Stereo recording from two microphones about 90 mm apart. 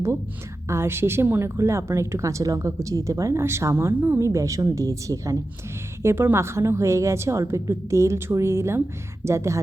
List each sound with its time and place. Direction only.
0.7 s a woman's voice: 25° right (ahead or behind)